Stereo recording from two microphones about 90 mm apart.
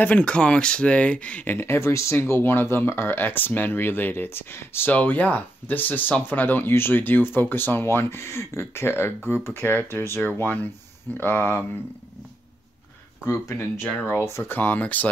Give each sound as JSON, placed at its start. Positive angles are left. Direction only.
{"t": 0.0, "sound": "speech", "side_deg": 15}
{"t": 13.2, "sound": "speech", "side_deg": 30}
{"t": 14.6, "sound": "speech", "side_deg": 20}